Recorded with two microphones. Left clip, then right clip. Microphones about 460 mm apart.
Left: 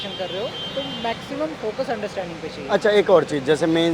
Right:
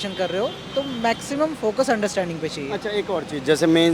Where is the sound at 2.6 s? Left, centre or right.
Centre.